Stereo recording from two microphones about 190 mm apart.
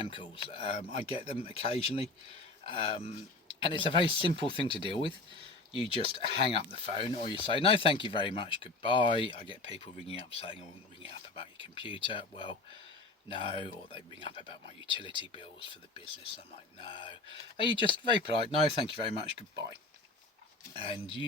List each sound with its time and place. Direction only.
0.0 s speech: 25° left (ahead or behind)
20.7 s speech: 30° left (ahead or behind)